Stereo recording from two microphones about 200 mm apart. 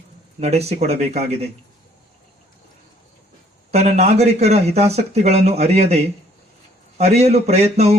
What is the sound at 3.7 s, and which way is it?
Speech, 35° right (ahead or behind).